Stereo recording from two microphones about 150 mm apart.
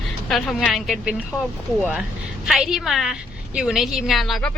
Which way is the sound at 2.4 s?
5° right (ahead or behind).